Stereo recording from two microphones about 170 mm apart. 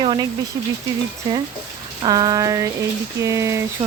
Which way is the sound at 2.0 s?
25° right (ahead or behind).